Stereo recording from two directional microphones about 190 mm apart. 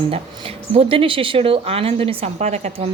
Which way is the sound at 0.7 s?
30° right (ahead or behind).